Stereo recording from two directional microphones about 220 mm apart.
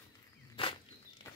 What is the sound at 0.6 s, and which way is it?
Walk, 25° left (ahead or behind).